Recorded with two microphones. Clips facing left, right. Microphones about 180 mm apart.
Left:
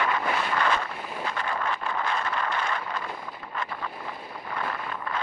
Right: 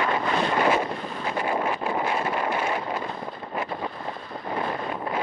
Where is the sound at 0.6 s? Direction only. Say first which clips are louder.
Right 5 dB; 20° right (ahead or behind).